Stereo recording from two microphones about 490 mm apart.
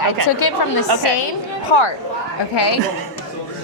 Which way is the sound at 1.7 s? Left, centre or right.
Left.